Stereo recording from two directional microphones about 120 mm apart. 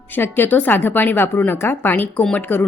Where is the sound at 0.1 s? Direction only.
15° left (ahead or behind).